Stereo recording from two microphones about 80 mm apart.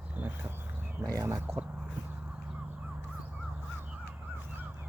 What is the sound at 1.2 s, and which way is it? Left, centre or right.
Speech, right.